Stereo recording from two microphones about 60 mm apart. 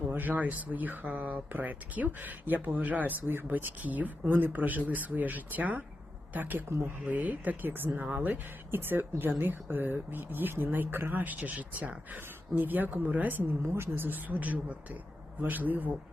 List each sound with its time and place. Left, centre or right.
0.1 s speech: right
6.7 s speech: right
7.0 s speech: right
13.7 s speech: right